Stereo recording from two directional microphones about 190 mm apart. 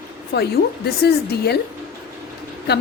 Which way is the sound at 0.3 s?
55° left (ahead or behind).